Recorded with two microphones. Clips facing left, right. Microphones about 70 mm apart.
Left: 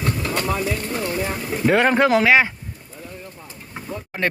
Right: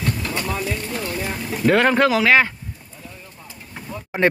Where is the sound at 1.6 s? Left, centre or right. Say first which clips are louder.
Right 1 dB; centre.